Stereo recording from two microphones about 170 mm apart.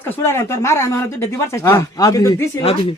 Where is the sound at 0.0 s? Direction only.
10° left (ahead or behind).